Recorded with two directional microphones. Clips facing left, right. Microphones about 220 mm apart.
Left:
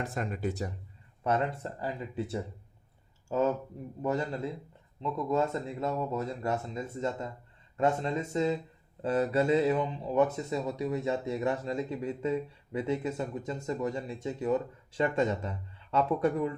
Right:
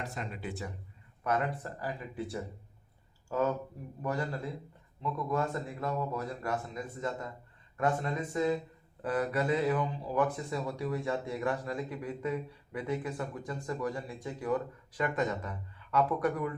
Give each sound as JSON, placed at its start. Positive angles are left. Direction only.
{"t": 0.0, "sound": "speech", "side_deg": 50}
{"t": 1.2, "sound": "speech", "side_deg": 25}